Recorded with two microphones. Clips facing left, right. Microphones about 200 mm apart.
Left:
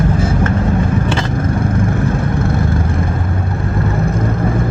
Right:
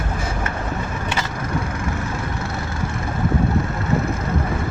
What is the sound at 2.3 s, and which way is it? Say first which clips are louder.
Vehicle: left 10 dB; 55° left (ahead or behind).